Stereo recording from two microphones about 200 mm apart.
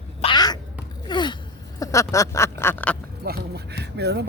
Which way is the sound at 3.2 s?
55° right (ahead or behind).